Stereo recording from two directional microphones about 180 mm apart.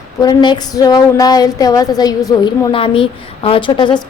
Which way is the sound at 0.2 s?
20° left (ahead or behind).